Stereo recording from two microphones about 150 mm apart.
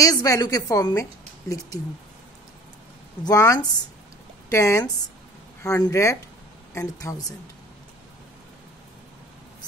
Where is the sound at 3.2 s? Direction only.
20° left (ahead or behind).